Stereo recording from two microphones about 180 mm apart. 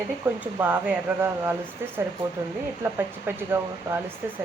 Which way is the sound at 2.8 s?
10° right (ahead or behind).